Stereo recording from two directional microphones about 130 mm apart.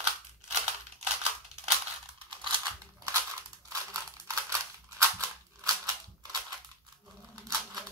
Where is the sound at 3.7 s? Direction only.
25° right (ahead or behind).